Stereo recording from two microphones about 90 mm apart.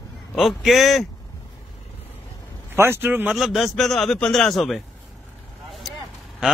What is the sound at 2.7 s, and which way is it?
Speech, 25° right (ahead or behind).